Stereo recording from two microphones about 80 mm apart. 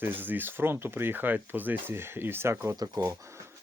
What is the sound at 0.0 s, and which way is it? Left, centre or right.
Speech, right.